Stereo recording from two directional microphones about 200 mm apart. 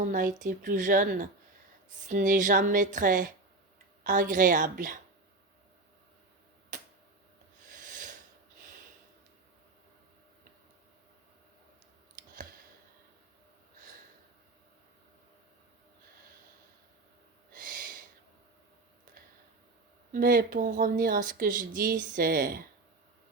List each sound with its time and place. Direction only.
0.0 s a woman's voice: 40° right (ahead or behind)
6.7 s tick-tock: 40° right (ahead or behind)
7.7 s a sound: 40° right (ahead or behind)
17.5 s owl: 45° right (ahead or behind)
20.1 s speech: 45° right (ahead or behind)